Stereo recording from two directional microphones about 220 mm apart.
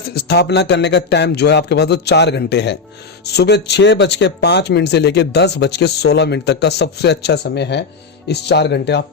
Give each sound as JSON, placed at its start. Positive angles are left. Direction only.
{"t": 0.1, "sound": "speech", "side_deg": 45}